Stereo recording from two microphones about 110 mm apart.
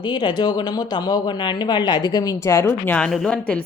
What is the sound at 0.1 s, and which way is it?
A woman's voice, 45° left (ahead or behind).